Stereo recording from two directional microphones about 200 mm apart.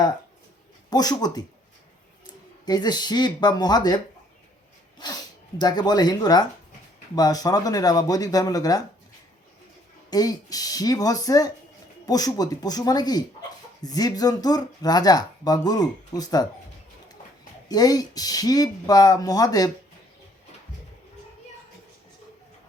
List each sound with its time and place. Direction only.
0.9 s speech: 20° left (ahead or behind)
2.6 s speech: 20° left (ahead or behind)
5.5 s speech: 20° left (ahead or behind)
10.1 s speech: 20° left (ahead or behind)
17.7 s speech: 20° left (ahead or behind)